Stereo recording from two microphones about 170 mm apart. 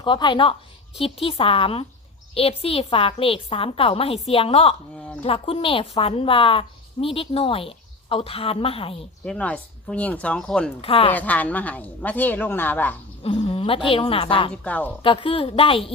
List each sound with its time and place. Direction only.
0.0 s a woman's voice: 30° left (ahead or behind)
9.2 s speech: 5° left (ahead or behind)
10.8 s a woman's voice: 35° left (ahead or behind)
11.1 s speech: 10° left (ahead or behind)
13.2 s a woman's voice: 35° left (ahead or behind)
14.5 s speech: 10° left (ahead or behind)
15.0 s a woman's voice: 30° left (ahead or behind)